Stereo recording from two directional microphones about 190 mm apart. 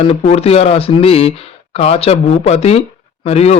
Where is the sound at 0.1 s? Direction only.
30° left (ahead or behind).